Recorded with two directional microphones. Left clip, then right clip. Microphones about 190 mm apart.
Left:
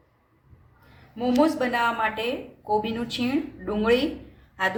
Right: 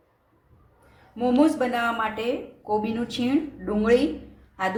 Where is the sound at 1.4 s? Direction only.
15° right (ahead or behind).